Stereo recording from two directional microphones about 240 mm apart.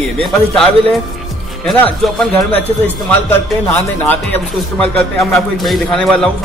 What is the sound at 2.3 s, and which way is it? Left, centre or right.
Speech, left.